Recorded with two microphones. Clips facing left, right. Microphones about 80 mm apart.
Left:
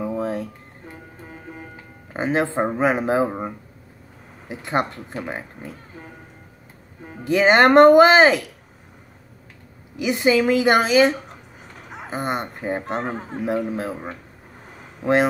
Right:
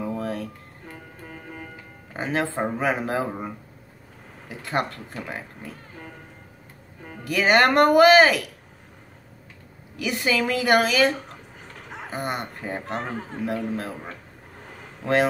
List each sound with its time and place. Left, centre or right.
0.0 s music: left
2.1 s speech: left
9.9 s speech: left
14.6 s a sound: centre